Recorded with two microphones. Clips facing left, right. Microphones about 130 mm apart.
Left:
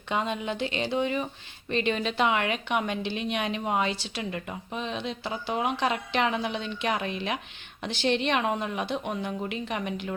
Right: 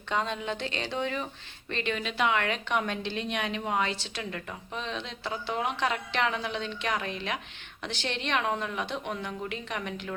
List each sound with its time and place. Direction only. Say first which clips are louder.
0.1 s a woman's voice: left 2 dB; 15° left (ahead or behind)